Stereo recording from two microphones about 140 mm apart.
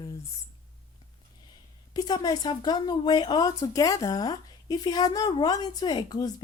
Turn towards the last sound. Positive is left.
turn(degrees=25)  # may be behind; listen again after turning